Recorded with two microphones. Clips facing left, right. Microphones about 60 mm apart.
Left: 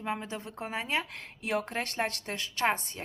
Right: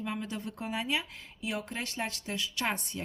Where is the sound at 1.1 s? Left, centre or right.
Left.